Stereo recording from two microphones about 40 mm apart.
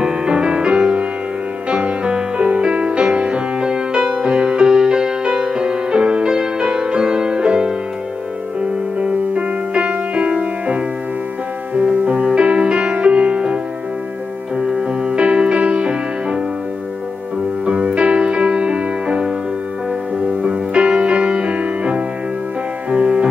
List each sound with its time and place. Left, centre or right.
0.0 s music: right
9.0 s music: right
14.6 s music: right
17.6 s music: right
20.4 s music: right